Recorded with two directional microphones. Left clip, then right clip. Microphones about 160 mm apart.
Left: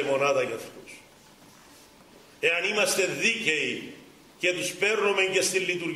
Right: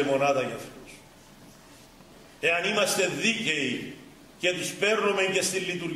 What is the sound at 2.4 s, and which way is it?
A man's voice, 10° left (ahead or behind).